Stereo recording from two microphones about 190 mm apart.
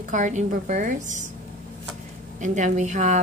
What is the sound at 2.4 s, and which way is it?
Speech, 40° right (ahead or behind).